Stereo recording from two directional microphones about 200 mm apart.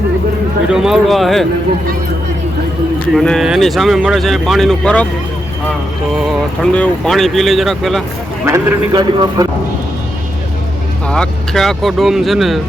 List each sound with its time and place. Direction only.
0.7 s speech: centre (ahead or behind)
3.2 s speech: centre (ahead or behind)
6.2 s speech: 5° left (ahead or behind)
8.4 s a man's voice: 10° right (ahead or behind)
8.9 s speech: 20° right (ahead or behind)
11.1 s speech: 5° left (ahead or behind)